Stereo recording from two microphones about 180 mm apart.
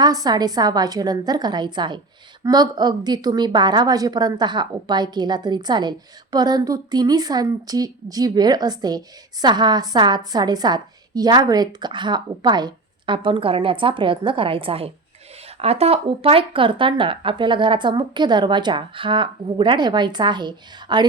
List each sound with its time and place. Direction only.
0.0 s a woman's voice: 20° right (ahead or behind)